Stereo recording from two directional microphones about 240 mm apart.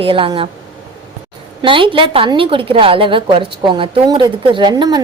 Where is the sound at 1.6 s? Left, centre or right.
Right.